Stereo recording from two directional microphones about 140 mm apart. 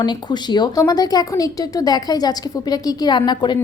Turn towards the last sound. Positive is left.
turn(degrees=30)  # may be behind; listen again after turning